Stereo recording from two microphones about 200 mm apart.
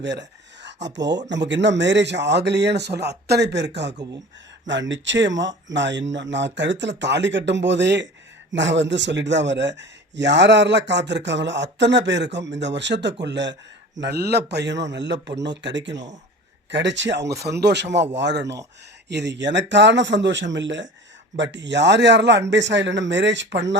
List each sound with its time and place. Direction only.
0.0 s a man's voice: 60° right (ahead or behind)